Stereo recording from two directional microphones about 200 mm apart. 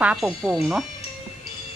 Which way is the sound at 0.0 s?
5° right (ahead or behind).